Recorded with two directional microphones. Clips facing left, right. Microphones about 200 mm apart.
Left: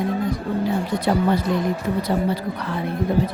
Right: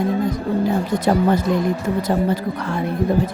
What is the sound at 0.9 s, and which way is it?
Speech, 45° right (ahead or behind).